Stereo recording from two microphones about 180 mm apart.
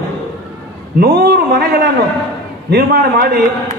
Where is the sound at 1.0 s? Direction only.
60° right (ahead or behind).